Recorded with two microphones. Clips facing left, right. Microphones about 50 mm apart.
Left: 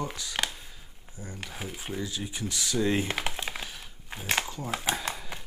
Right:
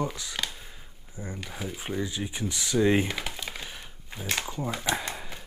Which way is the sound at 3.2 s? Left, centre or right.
Left.